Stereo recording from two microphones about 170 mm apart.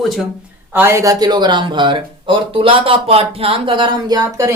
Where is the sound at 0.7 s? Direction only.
15° right (ahead or behind).